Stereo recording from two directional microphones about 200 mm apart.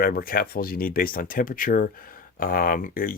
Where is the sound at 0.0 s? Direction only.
45° left (ahead or behind).